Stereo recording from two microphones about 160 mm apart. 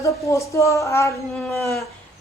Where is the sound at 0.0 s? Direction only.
20° left (ahead or behind).